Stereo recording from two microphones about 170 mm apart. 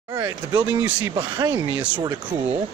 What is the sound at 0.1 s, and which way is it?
Speech, 15° right (ahead or behind).